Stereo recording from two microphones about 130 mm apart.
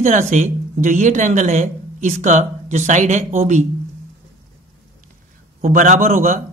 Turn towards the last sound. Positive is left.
turn(degrees=-85)